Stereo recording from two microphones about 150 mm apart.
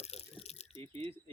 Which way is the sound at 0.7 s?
40° right (ahead or behind).